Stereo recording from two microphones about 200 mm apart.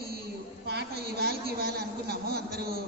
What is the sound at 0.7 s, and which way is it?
A woman's voice, 55° right (ahead or behind).